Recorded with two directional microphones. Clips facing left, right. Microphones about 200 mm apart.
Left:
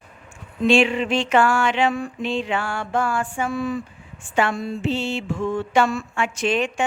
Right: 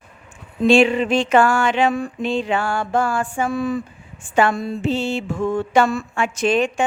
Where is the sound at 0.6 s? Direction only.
35° right (ahead or behind).